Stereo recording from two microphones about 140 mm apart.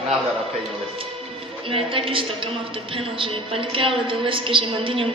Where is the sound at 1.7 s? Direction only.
40° right (ahead or behind).